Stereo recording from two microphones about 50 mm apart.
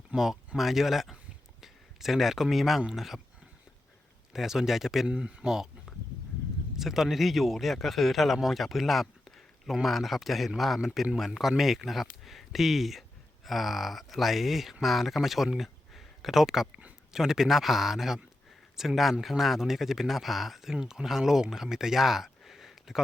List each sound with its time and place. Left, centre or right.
0.2 s speech: centre
4.3 s a man's voice: centre
5.0 s a man's voice: centre
6.7 s a man's voice: centre
15.5 s a sound: centre
17.1 s a man's voice: centre